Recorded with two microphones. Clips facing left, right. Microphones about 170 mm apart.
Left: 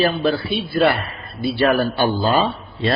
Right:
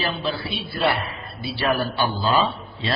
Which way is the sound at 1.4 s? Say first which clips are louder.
Left 6 dB; 60° left (ahead or behind).